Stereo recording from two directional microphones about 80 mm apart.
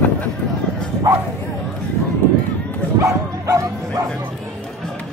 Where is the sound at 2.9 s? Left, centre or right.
Right.